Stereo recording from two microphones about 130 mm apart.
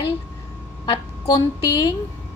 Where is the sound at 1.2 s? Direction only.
25° left (ahead or behind).